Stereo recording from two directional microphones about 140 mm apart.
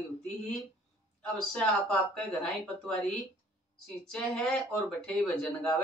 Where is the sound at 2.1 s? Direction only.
5° left (ahead or behind).